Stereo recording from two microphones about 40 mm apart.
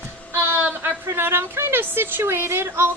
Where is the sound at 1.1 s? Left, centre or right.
Right.